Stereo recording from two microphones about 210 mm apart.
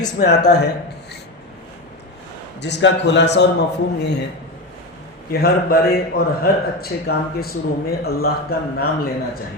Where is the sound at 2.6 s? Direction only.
55° left (ahead or behind).